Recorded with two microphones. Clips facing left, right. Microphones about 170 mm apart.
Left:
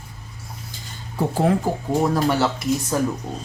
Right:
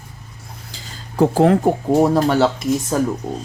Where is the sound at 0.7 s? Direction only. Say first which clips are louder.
Right 7 dB; 90° right.